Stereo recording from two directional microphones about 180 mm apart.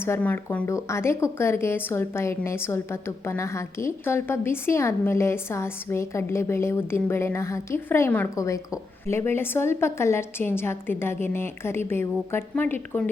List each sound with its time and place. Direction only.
0.0 s a woman's voice: 10° left (ahead or behind)